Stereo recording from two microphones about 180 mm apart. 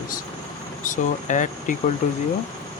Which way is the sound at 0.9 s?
45° left (ahead or behind).